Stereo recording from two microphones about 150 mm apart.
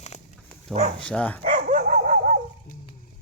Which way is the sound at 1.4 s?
55° right (ahead or behind).